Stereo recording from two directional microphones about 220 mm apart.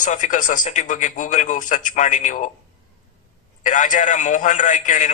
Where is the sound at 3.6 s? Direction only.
35° left (ahead or behind).